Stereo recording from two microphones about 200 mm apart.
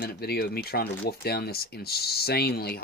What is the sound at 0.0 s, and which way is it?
Speech, 50° left (ahead or behind).